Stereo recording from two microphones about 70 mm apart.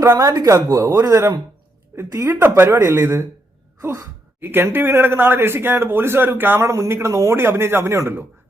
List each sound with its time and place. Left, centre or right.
0.0 s speech: right
2.3 s speech: right
4.4 s speech: right
6.6 s speech: right